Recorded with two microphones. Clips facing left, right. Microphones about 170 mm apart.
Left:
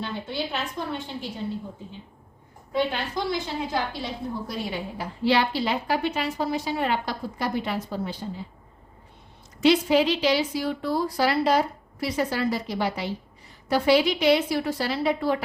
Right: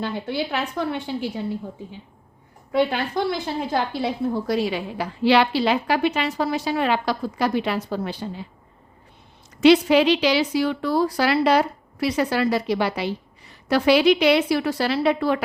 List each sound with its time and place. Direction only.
0.0 s a woman's voice: 65° right (ahead or behind)
2.7 s a woman's voice: 60° right (ahead or behind)
9.6 s a woman's voice: 75° right (ahead or behind)